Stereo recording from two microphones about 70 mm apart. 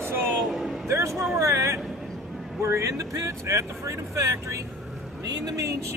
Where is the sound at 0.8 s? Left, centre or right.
Right.